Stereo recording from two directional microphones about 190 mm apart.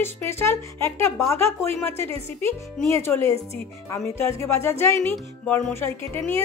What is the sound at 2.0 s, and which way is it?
Speech, 30° right (ahead or behind).